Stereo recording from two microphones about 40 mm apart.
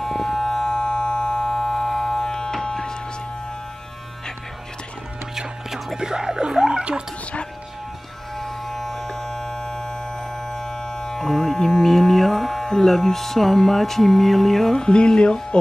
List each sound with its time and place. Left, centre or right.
0.0 s siren: centre
5.9 s a sound: centre
6.8 s gargling: right
8.4 s electric shaver: centre
10.5 s music: centre
14.9 s music: left